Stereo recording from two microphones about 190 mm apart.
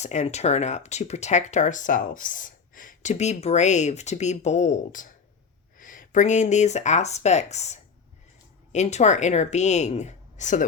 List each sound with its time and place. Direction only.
0.0 s speech: 35° left (ahead or behind)